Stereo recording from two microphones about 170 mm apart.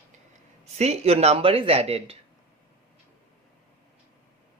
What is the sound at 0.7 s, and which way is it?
Speech, 40° right (ahead or behind).